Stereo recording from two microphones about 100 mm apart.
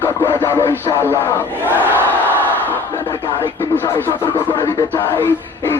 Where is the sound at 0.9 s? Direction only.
25° right (ahead or behind).